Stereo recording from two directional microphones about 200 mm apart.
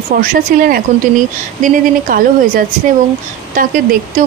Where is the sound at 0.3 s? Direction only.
45° right (ahead or behind).